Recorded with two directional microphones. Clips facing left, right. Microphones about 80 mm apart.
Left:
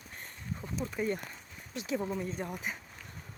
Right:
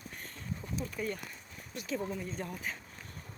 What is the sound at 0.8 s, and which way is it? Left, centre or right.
Speech, left.